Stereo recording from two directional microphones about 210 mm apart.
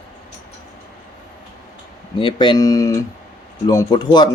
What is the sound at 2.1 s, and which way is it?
Speech, 20° left (ahead or behind).